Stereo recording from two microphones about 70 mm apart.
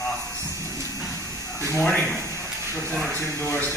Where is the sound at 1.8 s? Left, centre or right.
Left.